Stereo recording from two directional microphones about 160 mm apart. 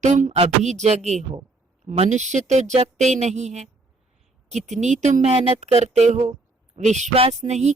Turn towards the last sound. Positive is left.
turn(degrees=-45)  # may be behind; listen again after turning